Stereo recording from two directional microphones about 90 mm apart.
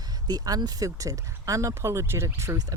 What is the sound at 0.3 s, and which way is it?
Speech, 45° right (ahead or behind).